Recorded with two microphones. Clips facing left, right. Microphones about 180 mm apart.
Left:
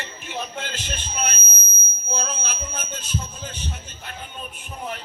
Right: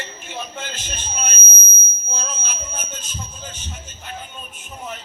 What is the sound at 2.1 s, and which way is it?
Speech, 65° left (ahead or behind).